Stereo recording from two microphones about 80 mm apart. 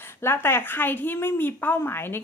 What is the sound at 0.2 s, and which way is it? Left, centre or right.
A woman's voice, left.